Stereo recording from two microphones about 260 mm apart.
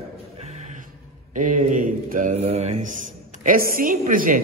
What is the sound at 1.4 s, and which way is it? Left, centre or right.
A man's voice, right.